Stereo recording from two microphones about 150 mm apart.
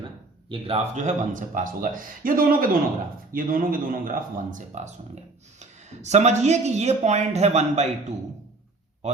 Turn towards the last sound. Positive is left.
turn(degrees=-45)  # may be behind; listen again after turning